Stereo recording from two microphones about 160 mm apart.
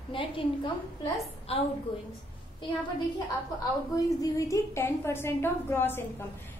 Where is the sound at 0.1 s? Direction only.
30° left (ahead or behind).